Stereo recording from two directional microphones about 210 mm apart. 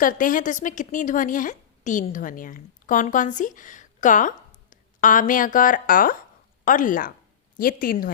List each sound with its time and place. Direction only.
0.0 s a woman's voice: 40° left (ahead or behind)